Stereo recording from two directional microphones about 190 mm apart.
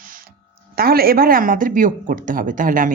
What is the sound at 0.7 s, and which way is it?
Speech, 50° right (ahead or behind).